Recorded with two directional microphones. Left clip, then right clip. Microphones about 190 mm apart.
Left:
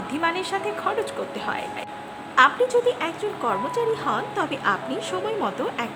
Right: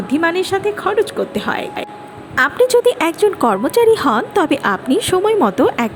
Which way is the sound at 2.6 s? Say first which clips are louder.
Right 9 dB; 45° right (ahead or behind).